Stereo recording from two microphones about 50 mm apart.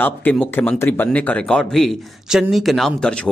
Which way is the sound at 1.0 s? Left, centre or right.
Left.